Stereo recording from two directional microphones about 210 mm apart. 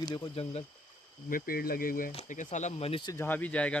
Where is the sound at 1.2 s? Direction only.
45° left (ahead or behind); by 3.7 s 5° left (ahead or behind).